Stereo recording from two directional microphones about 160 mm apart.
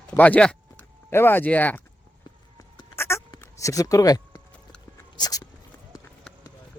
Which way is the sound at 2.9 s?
15° left (ahead or behind).